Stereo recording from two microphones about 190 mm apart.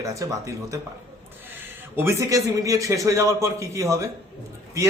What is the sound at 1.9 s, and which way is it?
Speech, 15° right (ahead or behind).